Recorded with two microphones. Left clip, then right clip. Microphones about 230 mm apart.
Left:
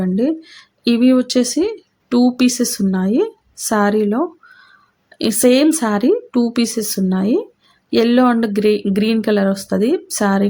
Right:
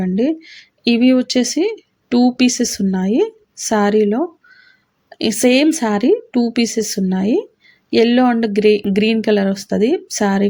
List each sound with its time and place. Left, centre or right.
0.0 s speech: centre